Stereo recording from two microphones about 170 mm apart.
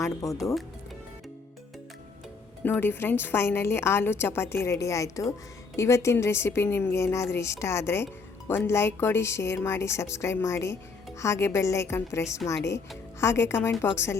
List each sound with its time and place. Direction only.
0.0 s speech: 20° left (ahead or behind)
2.6 s a woman's voice: 10° left (ahead or behind)